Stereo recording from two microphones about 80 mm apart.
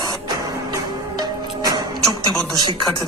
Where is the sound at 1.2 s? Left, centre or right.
Right.